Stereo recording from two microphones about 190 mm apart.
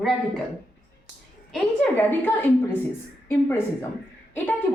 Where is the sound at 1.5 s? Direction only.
10° left (ahead or behind).